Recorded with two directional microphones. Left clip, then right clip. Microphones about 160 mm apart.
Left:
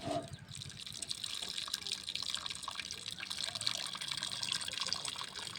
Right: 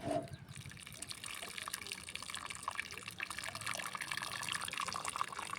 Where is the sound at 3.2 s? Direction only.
40° right (ahead or behind).